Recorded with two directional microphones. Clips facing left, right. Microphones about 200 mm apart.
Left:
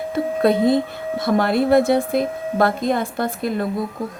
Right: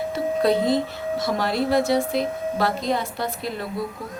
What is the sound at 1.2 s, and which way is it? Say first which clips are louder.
A woman's voice: left 7 dB; 55° left (ahead or behind).